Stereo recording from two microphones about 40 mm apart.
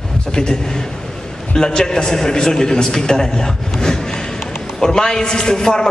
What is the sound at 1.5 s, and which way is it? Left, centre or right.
A man's voice, centre.